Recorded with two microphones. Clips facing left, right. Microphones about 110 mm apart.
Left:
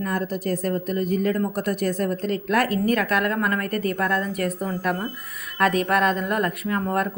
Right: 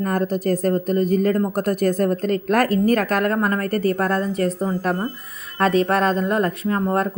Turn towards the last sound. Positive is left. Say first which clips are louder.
# right 3 dB
turn(degrees=-30)  # may be behind; listen again after turning